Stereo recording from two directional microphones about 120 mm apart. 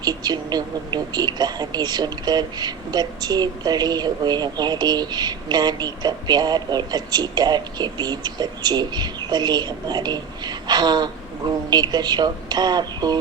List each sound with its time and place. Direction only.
0.0 s speech: 35° right (ahead or behind)